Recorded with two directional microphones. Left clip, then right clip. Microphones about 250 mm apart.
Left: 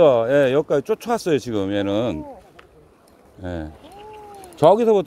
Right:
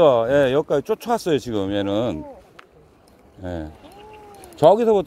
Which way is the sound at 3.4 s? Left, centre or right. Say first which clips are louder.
Even; centre.